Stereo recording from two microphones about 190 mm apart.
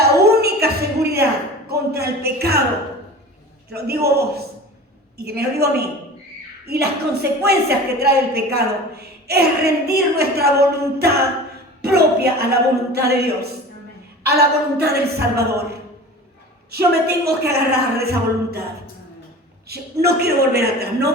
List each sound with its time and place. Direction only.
0.3 s a sound: 55° right (ahead or behind)
3.7 s a woman's voice: 55° right (ahead or behind)
16.7 s a woman's voice: 55° right (ahead or behind)
19.6 s a woman's voice: 55° right (ahead or behind)